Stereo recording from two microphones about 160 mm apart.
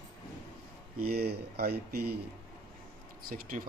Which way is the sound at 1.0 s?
70° right (ahead or behind).